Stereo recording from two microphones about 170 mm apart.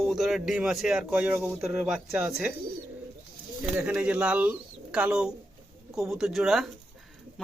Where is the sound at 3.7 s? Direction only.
10° right (ahead or behind).